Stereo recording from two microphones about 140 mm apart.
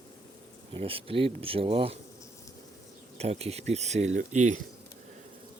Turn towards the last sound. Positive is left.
turn(degrees=-60)  # may be behind; listen again after turning